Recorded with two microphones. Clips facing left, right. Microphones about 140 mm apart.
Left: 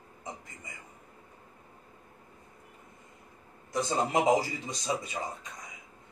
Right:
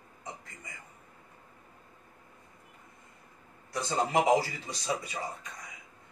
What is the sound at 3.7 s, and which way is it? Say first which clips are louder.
A man's voice: even; 20° left (ahead or behind).